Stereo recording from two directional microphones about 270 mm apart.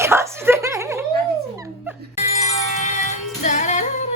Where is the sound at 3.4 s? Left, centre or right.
Left.